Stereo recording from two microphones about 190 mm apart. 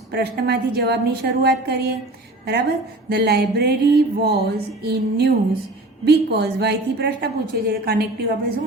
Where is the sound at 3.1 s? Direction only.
55° right (ahead or behind).